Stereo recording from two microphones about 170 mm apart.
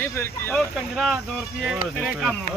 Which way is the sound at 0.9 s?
Centre (ahead or behind).